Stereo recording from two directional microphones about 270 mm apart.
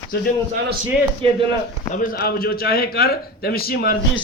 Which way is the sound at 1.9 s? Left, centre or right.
Left.